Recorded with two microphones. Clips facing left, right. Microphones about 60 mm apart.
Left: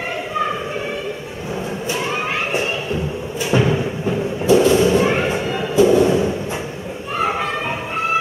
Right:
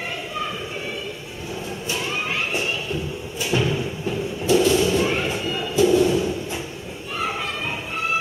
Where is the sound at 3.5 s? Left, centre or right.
Left.